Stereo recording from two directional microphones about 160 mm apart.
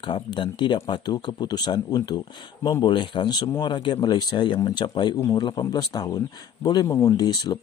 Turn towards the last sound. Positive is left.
turn(degrees=25)  # may be behind; listen again after turning